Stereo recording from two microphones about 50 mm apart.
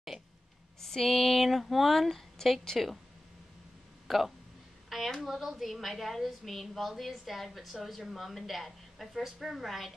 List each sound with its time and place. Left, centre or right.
0.7 s a woman's voice: centre
4.1 s a woman's voice: centre